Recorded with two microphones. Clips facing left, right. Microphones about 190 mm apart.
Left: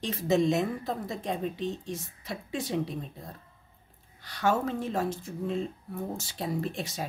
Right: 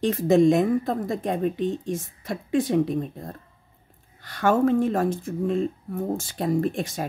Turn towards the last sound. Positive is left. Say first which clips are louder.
# right 8 dB
turn(degrees=-50)  # may be behind; listen again after turning